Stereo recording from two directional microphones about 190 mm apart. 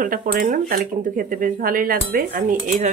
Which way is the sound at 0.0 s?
50° right (ahead or behind).